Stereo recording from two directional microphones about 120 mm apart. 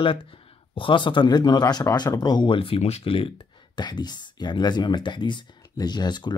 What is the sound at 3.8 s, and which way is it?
Speech, 35° left (ahead or behind).